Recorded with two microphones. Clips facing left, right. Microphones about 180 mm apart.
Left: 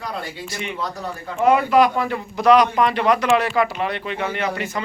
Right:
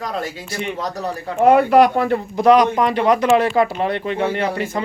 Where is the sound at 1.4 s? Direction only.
60° right (ahead or behind).